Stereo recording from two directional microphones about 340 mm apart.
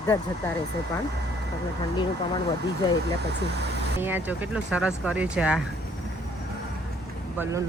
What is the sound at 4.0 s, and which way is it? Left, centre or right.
A woman's voice, centre.